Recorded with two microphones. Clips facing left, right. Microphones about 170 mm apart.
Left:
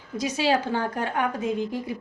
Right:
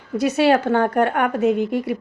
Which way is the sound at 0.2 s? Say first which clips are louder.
Right 7 dB; 60° right (ahead or behind).